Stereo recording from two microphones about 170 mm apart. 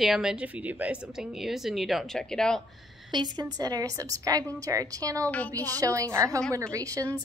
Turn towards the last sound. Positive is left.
turn(degrees=-20)  # may be behind; listen again after turning